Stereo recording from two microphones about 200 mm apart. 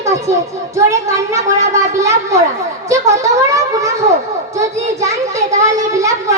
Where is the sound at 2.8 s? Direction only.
15° right (ahead or behind).